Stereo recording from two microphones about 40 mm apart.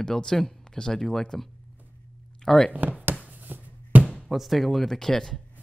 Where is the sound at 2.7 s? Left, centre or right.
Right.